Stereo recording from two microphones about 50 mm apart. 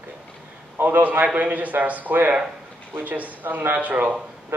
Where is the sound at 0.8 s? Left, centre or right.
Right.